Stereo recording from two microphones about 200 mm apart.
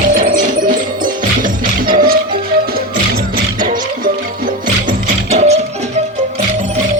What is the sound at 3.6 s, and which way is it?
Music, 45° right (ahead or behind).